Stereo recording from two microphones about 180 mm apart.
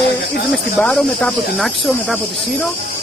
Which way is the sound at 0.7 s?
5° left (ahead or behind).